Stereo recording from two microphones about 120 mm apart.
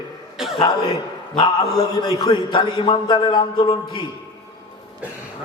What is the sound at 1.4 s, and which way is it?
A man's voice, 35° left (ahead or behind).